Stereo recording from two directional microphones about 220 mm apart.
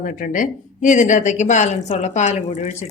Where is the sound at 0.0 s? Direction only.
40° left (ahead or behind).